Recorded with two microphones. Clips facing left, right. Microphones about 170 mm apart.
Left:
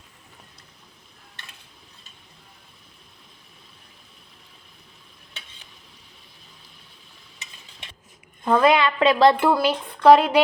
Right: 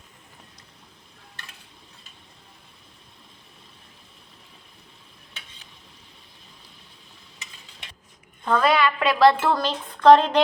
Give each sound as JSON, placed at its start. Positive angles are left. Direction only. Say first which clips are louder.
{"t": 8.4, "sound": "a woman's voice", "louder": "left 3 dB", "side_deg": 20}
{"t": 9.4, "sound": "speech", "louder": "left 4 dB", "side_deg": 10}